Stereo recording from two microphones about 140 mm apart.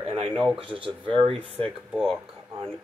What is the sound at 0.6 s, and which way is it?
Speech, 40° right (ahead or behind).